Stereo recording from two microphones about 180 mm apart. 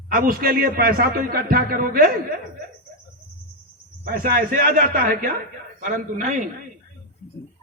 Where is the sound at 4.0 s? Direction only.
55° right (ahead or behind).